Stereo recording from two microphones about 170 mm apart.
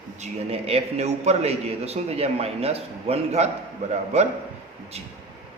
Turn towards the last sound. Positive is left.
turn(degrees=-40)  # may be behind; listen again after turning